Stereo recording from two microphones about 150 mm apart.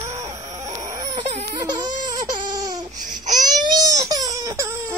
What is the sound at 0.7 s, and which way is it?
Baby cry, 25° right (ahead or behind).